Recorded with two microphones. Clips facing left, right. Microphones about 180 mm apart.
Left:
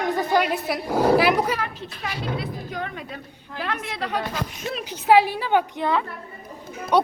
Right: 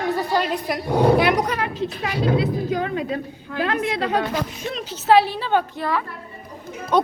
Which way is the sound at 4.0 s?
90° right.